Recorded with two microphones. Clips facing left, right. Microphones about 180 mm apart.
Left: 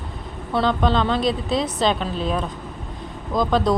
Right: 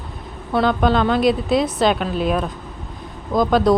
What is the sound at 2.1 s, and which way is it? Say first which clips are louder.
A woman's voice: right 4 dB; 10° right (ahead or behind).